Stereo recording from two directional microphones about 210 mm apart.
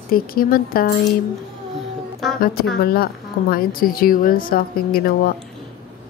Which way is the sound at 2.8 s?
45° left (ahead or behind).